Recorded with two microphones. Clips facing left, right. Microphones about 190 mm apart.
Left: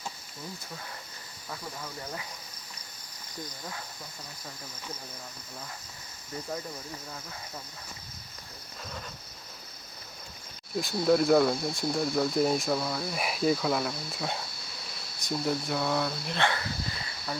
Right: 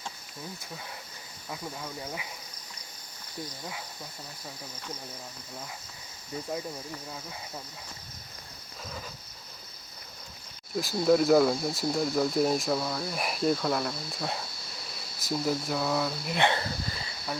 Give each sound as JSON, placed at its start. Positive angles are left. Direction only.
{"t": 1.5, "sound": "speech", "side_deg": -10}
{"t": 10.8, "sound": "speech", "side_deg": 0}
{"t": 16.4, "sound": "speech", "side_deg": -25}